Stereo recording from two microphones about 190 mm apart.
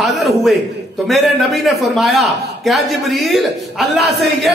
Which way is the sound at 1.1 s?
Centre (ahead or behind).